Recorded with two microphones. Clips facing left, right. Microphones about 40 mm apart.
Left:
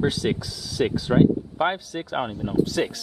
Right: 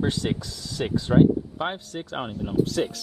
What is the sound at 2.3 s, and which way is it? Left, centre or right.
Speech, centre.